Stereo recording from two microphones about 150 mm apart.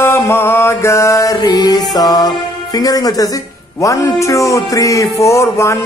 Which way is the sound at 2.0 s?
25° left (ahead or behind).